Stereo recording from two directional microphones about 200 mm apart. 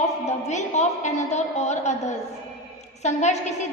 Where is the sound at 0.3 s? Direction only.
35° left (ahead or behind).